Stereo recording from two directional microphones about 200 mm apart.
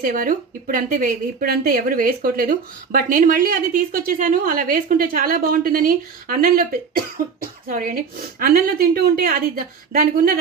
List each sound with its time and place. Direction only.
0.0 s a woman's voice: 45° right (ahead or behind)